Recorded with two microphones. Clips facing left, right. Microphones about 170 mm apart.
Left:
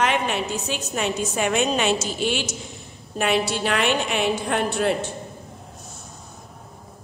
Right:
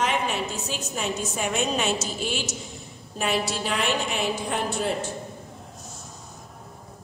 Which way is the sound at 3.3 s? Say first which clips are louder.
Left 3 dB; centre (ahead or behind).